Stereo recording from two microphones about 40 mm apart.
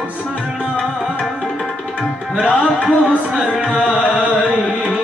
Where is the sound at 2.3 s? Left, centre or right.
Right.